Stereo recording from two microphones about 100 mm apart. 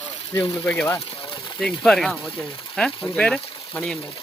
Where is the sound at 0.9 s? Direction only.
70° left (ahead or behind).